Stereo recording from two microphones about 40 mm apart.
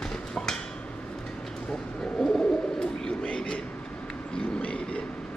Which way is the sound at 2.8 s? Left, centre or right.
Centre.